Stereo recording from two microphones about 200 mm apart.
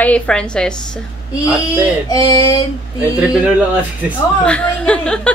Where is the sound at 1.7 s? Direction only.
20° left (ahead or behind).